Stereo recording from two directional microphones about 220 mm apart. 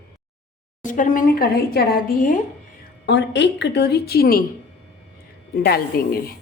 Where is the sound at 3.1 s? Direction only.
50° left (ahead or behind).